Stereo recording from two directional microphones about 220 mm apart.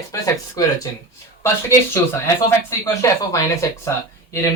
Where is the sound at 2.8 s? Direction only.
15° left (ahead or behind).